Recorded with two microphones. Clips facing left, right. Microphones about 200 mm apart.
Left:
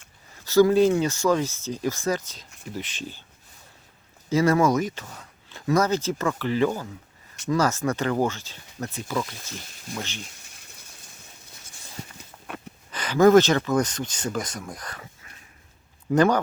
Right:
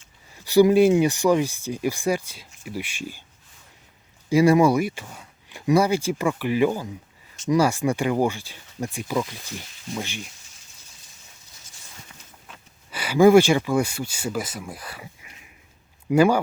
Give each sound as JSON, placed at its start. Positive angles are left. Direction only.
{"t": 0.3, "sound": "speech", "side_deg": -15}
{"t": 4.3, "sound": "speech", "side_deg": -10}
{"t": 10.4, "sound": "rain", "side_deg": 65}
{"t": 12.9, "sound": "speech", "side_deg": -10}